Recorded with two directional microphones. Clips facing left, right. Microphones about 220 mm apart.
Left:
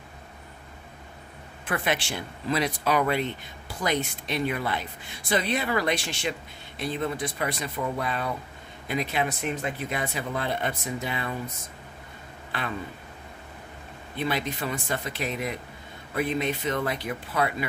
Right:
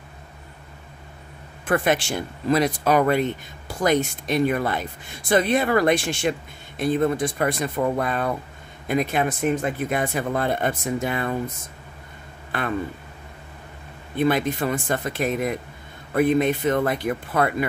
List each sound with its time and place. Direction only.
1.7 s speech: 45° right (ahead or behind)
12.5 s speech: 50° right (ahead or behind)
14.1 s speech: 50° right (ahead or behind)